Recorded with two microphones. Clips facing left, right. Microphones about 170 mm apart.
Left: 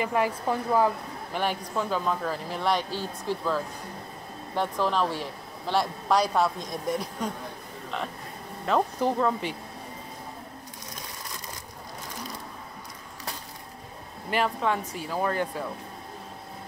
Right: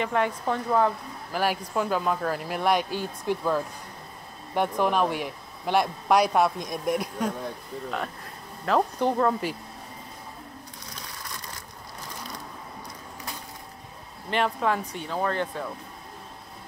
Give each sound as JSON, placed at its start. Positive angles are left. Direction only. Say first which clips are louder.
{"t": 0.0, "sound": "speech", "louder": "even", "side_deg": 5}
{"t": 1.4, "sound": "speech", "louder": "right 3 dB", "side_deg": -10}
{"t": 8.6, "sound": "speech", "louder": "right 1 dB", "side_deg": 0}
{"t": 14.3, "sound": "speech", "louder": "right 1 dB", "side_deg": 0}